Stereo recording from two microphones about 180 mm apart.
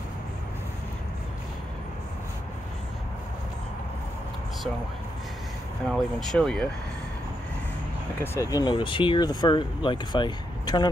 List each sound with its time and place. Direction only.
5.9 s speech: centre (ahead or behind)
8.2 s speech: 20° left (ahead or behind)